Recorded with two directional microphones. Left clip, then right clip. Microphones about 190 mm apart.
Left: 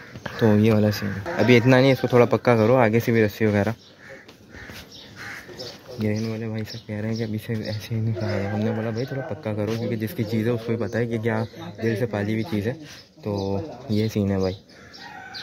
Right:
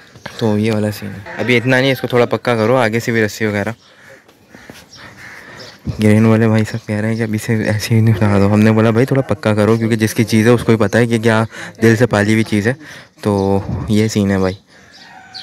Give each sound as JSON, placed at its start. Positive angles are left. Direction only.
{"t": 0.2, "sound": "speech", "side_deg": -5}
{"t": 5.9, "sound": "speech", "side_deg": -25}